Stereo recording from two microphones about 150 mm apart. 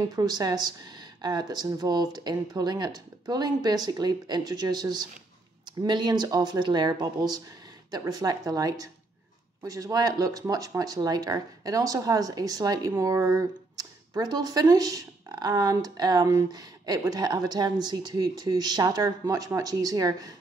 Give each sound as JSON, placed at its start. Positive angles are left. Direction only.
{"t": 0.0, "sound": "speech", "side_deg": -25}